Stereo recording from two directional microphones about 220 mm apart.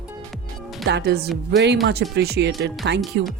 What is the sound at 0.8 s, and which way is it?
Speech, 50° right (ahead or behind).